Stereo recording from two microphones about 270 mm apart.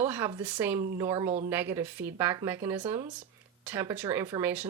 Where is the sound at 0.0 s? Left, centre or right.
Centre.